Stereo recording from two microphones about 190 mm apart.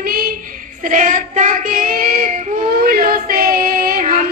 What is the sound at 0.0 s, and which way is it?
Child singing, 50° right (ahead or behind).